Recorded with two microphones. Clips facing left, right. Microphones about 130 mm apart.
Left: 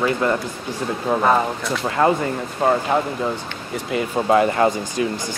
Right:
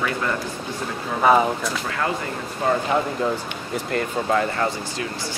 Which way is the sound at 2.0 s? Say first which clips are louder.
Left 9 dB; 40° left (ahead or behind).